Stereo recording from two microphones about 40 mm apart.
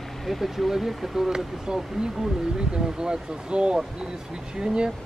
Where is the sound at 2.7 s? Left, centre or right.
Right.